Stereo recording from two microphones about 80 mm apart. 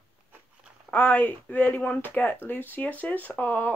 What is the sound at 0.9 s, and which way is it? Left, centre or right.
Speech, left.